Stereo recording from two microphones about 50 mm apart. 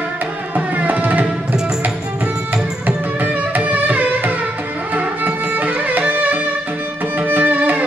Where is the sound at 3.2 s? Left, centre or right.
Right.